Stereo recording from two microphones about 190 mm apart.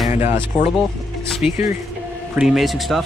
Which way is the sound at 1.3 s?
Centre (ahead or behind).